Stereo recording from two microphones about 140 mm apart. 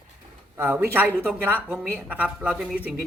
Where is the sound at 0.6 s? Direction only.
15° right (ahead or behind).